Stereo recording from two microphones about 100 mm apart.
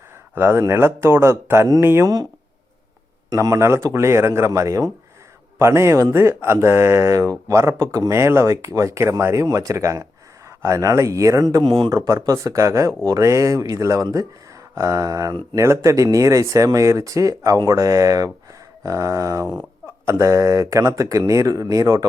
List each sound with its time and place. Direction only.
0.3 s speech: 20° right (ahead or behind)
3.2 s speech: 35° right (ahead or behind)
11.6 s a man's voice: 55° right (ahead or behind)
11.9 s speech: 30° right (ahead or behind)